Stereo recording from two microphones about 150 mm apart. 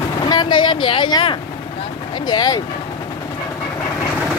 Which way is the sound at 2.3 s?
25° left (ahead or behind).